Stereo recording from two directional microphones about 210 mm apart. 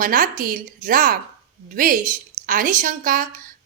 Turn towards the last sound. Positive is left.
turn(degrees=-40)  # may be behind; listen again after turning